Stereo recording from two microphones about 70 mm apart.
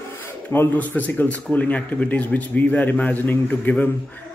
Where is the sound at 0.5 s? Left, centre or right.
Left.